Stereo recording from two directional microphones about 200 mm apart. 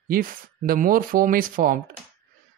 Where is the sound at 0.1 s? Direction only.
45° right (ahead or behind).